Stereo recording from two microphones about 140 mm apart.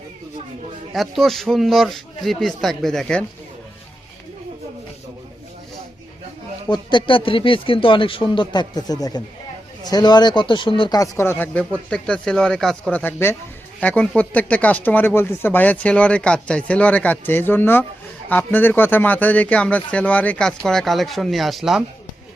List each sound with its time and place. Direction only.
0.9 s speech: centre (ahead or behind)
6.7 s speech: 35° left (ahead or behind); by 21.8 s 5° right (ahead or behind)